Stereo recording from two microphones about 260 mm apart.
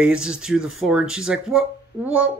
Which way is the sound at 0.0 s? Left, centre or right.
Centre.